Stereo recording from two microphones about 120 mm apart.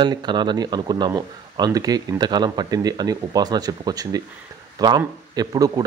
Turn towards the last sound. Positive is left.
turn(degrees=-30)  # may be behind; listen again after turning